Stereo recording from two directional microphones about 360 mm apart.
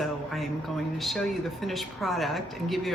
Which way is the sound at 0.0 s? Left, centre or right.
Centre.